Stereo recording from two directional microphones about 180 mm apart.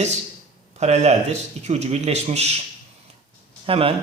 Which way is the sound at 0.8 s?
40° right (ahead or behind).